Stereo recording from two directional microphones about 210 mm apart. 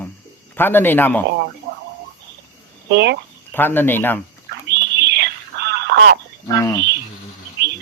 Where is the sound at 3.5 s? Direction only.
10° left (ahead or behind).